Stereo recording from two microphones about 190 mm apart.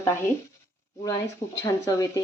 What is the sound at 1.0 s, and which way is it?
Speech, 15° left (ahead or behind).